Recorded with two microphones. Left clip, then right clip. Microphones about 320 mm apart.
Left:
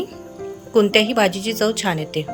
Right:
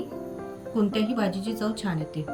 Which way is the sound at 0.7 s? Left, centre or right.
Centre.